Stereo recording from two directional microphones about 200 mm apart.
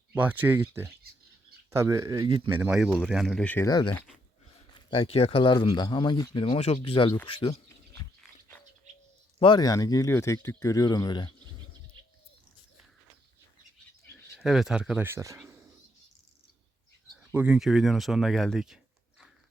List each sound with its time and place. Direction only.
0.1 s speech: 10° right (ahead or behind)
2.6 s speech: 5° right (ahead or behind)
3.7 s speech: 20° left (ahead or behind)
9.4 s speech: 20° left (ahead or behind)
14.3 s speech: centre (ahead or behind)
17.3 s speech: 5° right (ahead or behind)